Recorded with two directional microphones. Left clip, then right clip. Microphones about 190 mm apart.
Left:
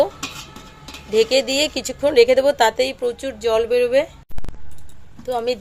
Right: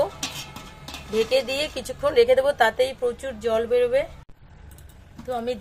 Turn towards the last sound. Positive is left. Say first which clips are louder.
# left 6 dB
turn(degrees=40)  # may be behind; listen again after turning